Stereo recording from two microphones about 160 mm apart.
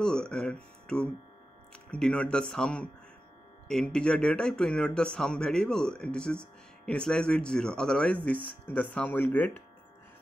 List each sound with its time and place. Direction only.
0.0 s speech: 5° left (ahead or behind)